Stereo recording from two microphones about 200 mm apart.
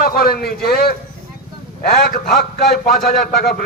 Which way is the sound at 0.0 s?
50° left (ahead or behind).